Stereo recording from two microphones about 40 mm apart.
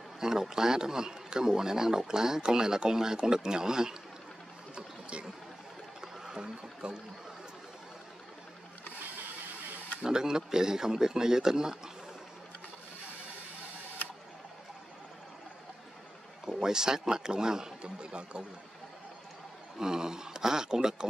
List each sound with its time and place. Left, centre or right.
0.2 s a man's voice: centre
4.7 s boat: right
5.9 s a sound: centre
10.0 s a man's voice: centre
16.4 s a man's voice: centre
19.8 s a man's voice: centre